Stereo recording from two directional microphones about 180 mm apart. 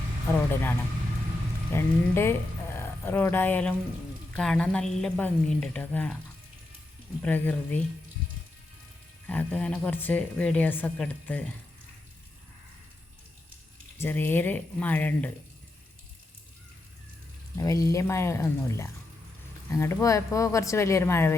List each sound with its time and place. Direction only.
0.3 s a woman's voice: 10° left (ahead or behind)
7.2 s a woman's voice: 10° left (ahead or behind)
9.2 s a woman's voice: 10° left (ahead or behind)
14.0 s a woman's voice: 10° left (ahead or behind)
17.6 s a woman's voice: 20° left (ahead or behind)